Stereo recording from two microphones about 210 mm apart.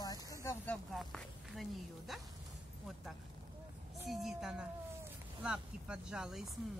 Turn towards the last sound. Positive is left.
turn(degrees=-5)  # may be behind; listen again after turning